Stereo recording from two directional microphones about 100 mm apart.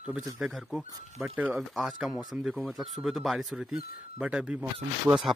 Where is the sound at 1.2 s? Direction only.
25° right (ahead or behind).